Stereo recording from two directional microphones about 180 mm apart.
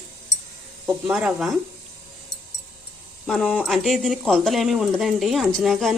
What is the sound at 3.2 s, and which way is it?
Speech, 5° left (ahead or behind).